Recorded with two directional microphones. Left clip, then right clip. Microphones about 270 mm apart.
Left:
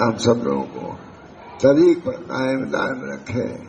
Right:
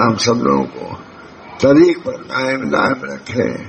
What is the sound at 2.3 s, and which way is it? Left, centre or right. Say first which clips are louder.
Speech: right 6 dB; centre.